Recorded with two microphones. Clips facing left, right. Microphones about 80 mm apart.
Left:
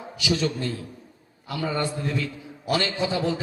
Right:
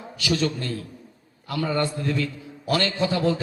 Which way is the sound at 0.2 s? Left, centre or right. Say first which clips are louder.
Right 1 dB; centre.